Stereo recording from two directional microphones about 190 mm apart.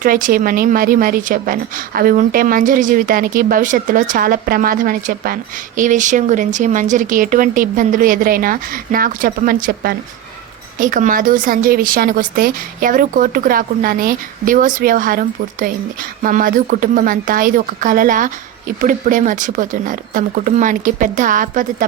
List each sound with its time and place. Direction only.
0.0 s a woman's voice: 45° right (ahead or behind)